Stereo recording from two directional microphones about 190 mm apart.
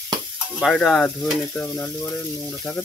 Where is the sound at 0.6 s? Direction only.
Centre (ahead or behind).